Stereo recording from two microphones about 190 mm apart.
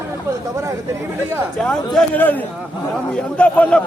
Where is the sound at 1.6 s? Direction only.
5° left (ahead or behind).